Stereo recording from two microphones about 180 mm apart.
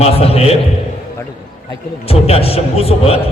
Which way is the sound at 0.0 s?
35° left (ahead or behind).